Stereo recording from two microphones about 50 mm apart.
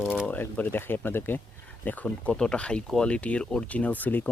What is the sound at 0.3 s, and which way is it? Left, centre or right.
Speech, left.